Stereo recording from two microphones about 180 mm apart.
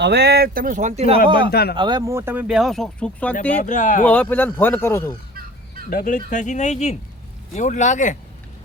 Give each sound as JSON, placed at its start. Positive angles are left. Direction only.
{"t": 0.0, "sound": "speech", "side_deg": -65}
{"t": 1.5, "sound": "speech", "side_deg": 60}
{"t": 1.7, "sound": "speech", "side_deg": -25}
{"t": 3.6, "sound": "speech", "side_deg": 45}
{"t": 4.0, "sound": "speech", "side_deg": 10}
{"t": 5.9, "sound": "speech", "side_deg": 50}